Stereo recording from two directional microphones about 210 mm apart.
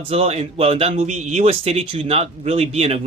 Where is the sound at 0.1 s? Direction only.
30° right (ahead or behind).